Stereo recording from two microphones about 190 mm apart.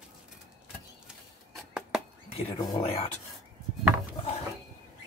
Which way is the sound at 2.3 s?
30° left (ahead or behind).